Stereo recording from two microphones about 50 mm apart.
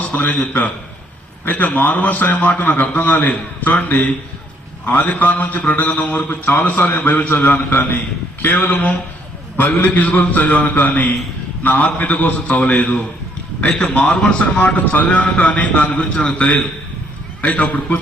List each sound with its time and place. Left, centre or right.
0.0 s a man's voice: left
13.7 s a man's voice: left